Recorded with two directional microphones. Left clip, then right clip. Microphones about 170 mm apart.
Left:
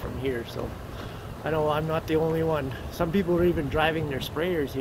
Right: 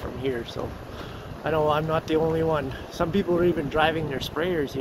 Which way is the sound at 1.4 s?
5° right (ahead or behind).